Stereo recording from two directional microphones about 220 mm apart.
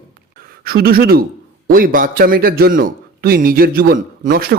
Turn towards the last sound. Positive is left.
turn(degrees=-40)  # may be behind; listen again after turning